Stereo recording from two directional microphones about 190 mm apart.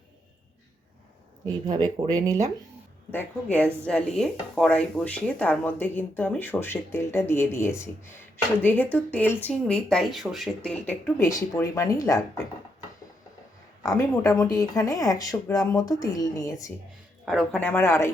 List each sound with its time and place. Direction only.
1.5 s speech: 20° right (ahead or behind)
3.1 s speech: 10° left (ahead or behind)
11.2 s speech: 15° left (ahead or behind)
13.8 s speech: 15° left (ahead or behind)
17.2 s speech: 5° left (ahead or behind)